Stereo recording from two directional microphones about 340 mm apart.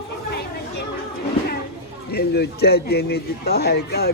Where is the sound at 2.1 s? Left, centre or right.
Left.